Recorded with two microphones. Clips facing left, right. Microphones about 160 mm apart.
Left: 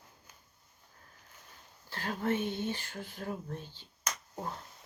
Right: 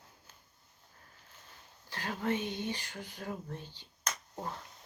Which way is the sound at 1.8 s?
15° right (ahead or behind).